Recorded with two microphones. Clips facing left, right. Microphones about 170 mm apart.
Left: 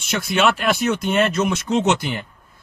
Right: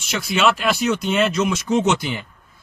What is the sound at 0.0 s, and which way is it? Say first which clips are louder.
A man's voice: even; 55° left (ahead or behind).